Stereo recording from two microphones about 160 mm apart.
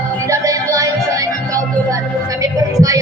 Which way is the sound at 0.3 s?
20° right (ahead or behind).